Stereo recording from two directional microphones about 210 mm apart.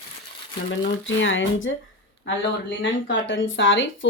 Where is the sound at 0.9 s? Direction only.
65° left (ahead or behind).